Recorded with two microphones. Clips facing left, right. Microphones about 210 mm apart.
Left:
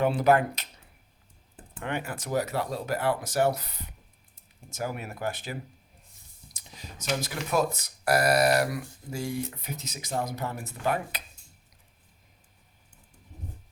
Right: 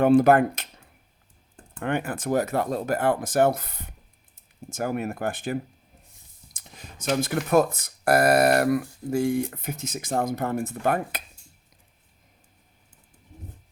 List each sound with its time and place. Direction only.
0.0 s speech: 50° right (ahead or behind)
1.8 s speech: 55° right (ahead or behind)